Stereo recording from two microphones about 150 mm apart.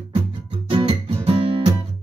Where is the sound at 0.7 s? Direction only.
40° right (ahead or behind).